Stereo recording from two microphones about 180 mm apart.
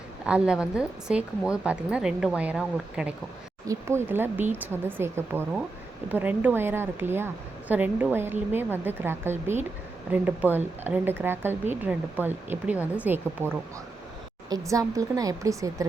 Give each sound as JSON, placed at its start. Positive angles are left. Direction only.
{"t": 0.3, "sound": "speech", "side_deg": -5}
{"t": 3.7, "sound": "a woman's voice", "side_deg": -15}